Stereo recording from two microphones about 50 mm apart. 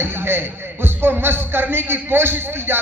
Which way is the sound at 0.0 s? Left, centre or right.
Right.